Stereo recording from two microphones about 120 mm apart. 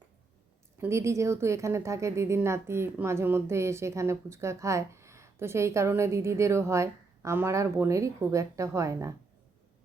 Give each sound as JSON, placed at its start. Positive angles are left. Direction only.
{"t": 0.8, "sound": "a woman's voice", "side_deg": -25}